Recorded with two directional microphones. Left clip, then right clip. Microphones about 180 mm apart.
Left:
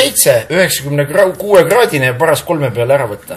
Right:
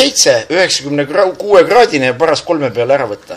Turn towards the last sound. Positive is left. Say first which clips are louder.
# even
turn(degrees=-30)  # may be behind; listen again after turning